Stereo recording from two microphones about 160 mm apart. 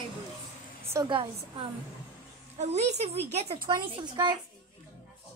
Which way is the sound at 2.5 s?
45° right (ahead or behind).